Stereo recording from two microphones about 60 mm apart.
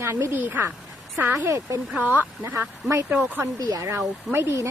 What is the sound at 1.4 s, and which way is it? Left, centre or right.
Speech, right.